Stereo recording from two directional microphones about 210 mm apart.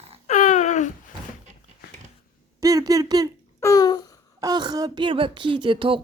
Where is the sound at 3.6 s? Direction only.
15° left (ahead or behind).